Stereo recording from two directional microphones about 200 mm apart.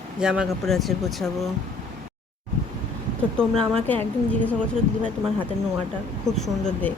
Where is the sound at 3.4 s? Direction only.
5° left (ahead or behind).